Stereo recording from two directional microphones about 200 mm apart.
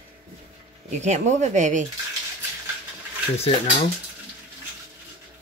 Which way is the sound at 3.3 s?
30° left (ahead or behind).